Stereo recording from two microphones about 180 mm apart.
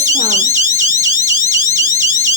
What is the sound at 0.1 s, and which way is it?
Alarm, 40° right (ahead or behind).